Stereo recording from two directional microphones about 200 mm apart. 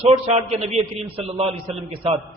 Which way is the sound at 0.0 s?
35° right (ahead or behind).